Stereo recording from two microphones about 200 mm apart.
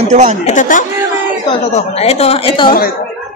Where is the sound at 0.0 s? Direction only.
35° right (ahead or behind).